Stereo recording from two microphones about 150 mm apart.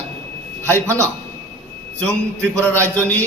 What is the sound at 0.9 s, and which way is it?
Speech, 20° right (ahead or behind).